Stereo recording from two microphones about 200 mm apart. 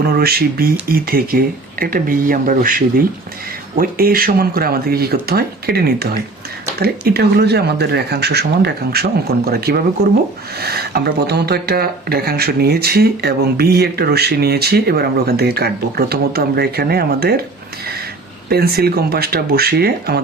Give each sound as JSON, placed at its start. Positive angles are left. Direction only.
{"t": 0.0, "sound": "speech", "side_deg": -50}
{"t": 18.4, "sound": "speech", "side_deg": -50}